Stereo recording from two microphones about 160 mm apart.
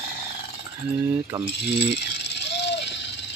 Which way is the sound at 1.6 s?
90° left.